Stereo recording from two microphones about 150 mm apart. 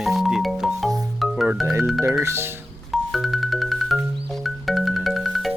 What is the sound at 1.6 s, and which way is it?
Speech, 15° right (ahead or behind).